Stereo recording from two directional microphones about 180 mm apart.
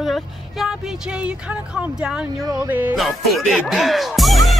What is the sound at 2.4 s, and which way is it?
Speech, 20° right (ahead or behind).